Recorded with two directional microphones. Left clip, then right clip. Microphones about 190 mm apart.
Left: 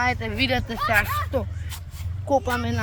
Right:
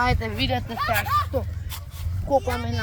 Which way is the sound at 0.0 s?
Centre (ahead or behind).